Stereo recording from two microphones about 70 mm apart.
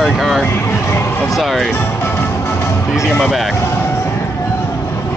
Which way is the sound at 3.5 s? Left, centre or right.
Left.